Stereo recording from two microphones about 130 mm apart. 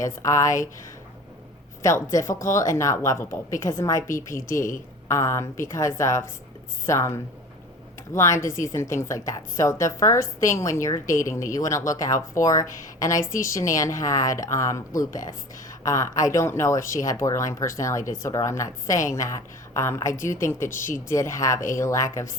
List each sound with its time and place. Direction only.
0.0 s a woman's voice: 25° left (ahead or behind)
1.8 s a woman's voice: 25° left (ahead or behind)